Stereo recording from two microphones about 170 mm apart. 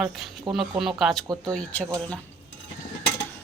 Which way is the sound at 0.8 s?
Centre (ahead or behind).